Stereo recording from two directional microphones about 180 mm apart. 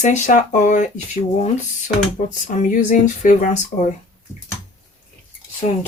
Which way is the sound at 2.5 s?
40° left (ahead or behind).